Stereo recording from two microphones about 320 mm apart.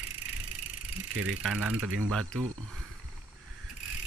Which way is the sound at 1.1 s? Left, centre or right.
Right.